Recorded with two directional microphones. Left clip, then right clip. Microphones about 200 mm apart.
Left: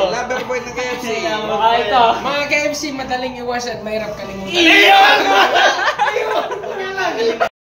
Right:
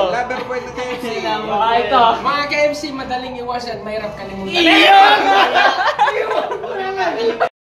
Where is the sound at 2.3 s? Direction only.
Centre (ahead or behind).